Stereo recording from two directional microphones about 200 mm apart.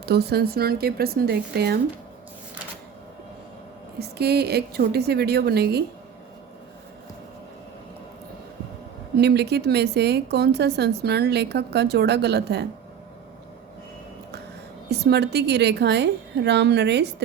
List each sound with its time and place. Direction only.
0.0 s speech: 55° right (ahead or behind)
4.0 s speech: 55° right (ahead or behind)
9.1 s a woman's voice: 55° right (ahead or behind)
14.8 s a woman's voice: 55° right (ahead or behind)